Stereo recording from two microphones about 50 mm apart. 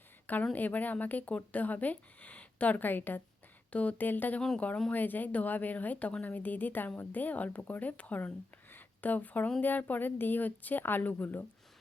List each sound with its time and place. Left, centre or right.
0.5 s a woman's voice: left
3.7 s speech: left
4.0 s a woman's voice: left
8.7 s a sound: left
9.6 s a woman's voice: left